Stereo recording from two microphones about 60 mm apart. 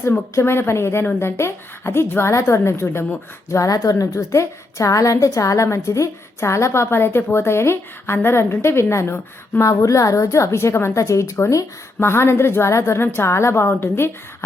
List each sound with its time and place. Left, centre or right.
0.3 s a woman's voice: left
3.5 s a woman's voice: left
5.6 s a woman's voice: left
9.6 s a woman's voice: left
11.9 s a woman's voice: left